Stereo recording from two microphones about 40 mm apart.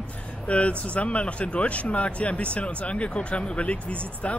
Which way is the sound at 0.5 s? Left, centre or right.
Left.